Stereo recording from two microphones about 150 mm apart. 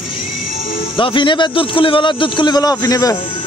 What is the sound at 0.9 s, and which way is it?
A man's voice, 35° left (ahead or behind).